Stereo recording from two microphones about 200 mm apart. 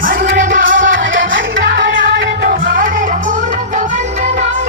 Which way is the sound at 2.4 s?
45° right (ahead or behind).